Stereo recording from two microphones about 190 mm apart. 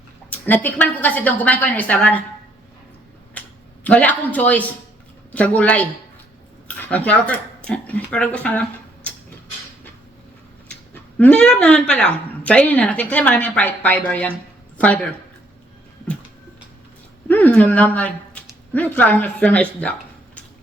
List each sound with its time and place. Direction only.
0.3 s a woman's voice: 10° left (ahead or behind)
3.4 s a sound: 10° left (ahead or behind)
3.8 s a woman's voice: 10° left (ahead or behind)
11.2 s a woman's voice: 5° left (ahead or behind)
17.2 s a woman's voice: 10° left (ahead or behind)